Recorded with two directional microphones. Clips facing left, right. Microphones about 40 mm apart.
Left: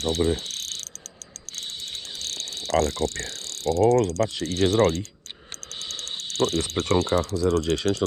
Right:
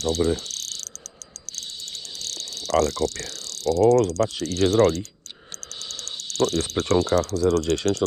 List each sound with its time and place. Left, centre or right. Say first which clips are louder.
0.0 s cricket: right 1 dB; left
2.2 s pulleys: right 1 dB; left
5.9 s speech: left 2 dB; left